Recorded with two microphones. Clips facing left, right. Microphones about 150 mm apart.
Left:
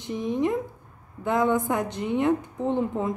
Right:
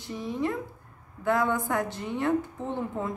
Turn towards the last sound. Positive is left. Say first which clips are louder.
# left 6 dB
turn(degrees=20)  # may be behind; listen again after turning